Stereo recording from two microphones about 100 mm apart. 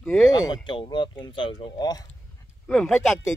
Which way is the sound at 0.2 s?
40° left (ahead or behind).